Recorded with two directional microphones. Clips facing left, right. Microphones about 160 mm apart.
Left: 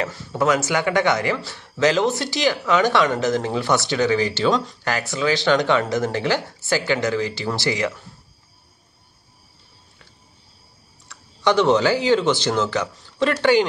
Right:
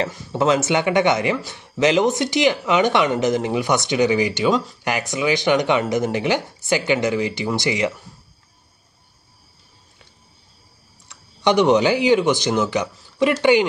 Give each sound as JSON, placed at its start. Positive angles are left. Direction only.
{"t": 0.1, "sound": "speech", "side_deg": -20}
{"t": 11.1, "sound": "speech", "side_deg": -20}